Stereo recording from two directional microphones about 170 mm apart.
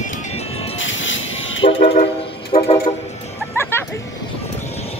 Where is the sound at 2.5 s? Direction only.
35° left (ahead or behind).